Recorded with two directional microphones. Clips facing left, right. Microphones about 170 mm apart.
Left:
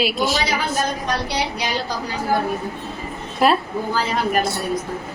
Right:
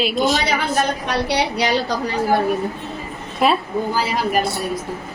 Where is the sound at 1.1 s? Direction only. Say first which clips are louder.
Right 3 dB; 70° right (ahead or behind).